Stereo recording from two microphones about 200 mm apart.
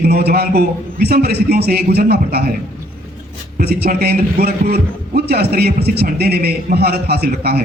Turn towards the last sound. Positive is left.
turn(degrees=-50)  # may be behind; listen again after turning